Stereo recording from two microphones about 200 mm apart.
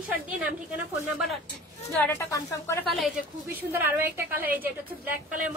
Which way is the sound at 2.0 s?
10° left (ahead or behind).